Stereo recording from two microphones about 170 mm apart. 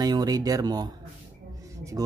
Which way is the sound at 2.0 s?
20° right (ahead or behind).